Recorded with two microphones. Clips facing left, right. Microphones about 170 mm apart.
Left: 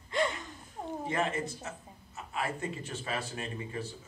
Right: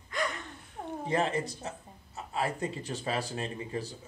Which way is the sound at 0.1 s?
30° left (ahead or behind).